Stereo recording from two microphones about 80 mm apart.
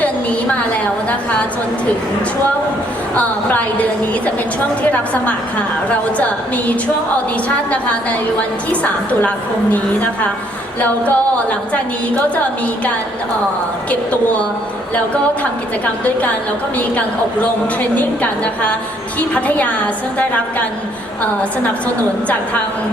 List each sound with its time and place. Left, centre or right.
0.0 s a sound: centre
3.2 s a capella: centre
4.8 s a woman's voice: centre
8.4 s a woman's voice: centre
10.8 s a capella: centre
17.9 s a capella: centre
19.3 s a woman's voice: centre